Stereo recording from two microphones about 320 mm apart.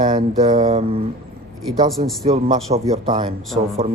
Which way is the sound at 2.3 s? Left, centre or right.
Centre.